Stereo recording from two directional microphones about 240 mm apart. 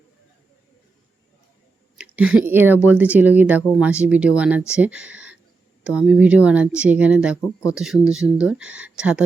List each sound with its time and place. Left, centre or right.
2.0 s speech: centre
7.4 s speech: centre
7.8 s speech: centre